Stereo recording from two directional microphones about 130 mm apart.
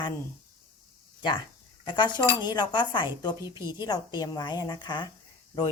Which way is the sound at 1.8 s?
35° left (ahead or behind).